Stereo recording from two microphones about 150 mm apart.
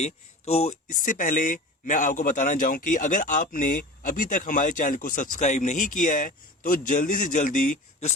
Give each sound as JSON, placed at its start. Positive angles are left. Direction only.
{"t": 0.0, "sound": "speech", "side_deg": 45}
{"t": 0.9, "sound": "a man's voice", "side_deg": 65}